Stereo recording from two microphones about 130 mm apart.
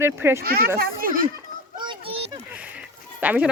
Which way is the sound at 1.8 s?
40° right (ahead or behind).